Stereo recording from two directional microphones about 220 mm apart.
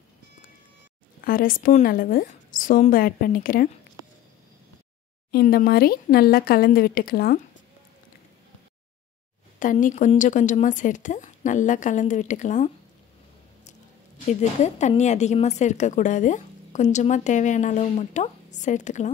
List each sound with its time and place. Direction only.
1.2 s a woman's voice: 40° left (ahead or behind)
5.3 s speech: 45° left (ahead or behind)
9.6 s a woman's voice: 35° left (ahead or behind)
14.6 s a woman's voice: 30° left (ahead or behind)